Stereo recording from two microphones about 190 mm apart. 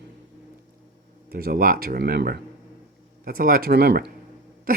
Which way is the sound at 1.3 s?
50° right (ahead or behind).